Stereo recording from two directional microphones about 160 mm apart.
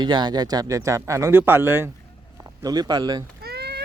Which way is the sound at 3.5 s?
90° right.